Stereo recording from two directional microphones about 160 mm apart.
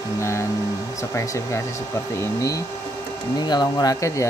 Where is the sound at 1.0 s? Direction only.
20° left (ahead or behind).